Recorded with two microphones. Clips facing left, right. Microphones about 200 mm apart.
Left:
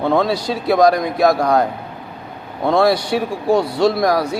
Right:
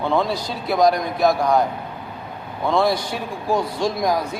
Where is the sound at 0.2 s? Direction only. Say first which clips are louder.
Left 5 dB; 90° left.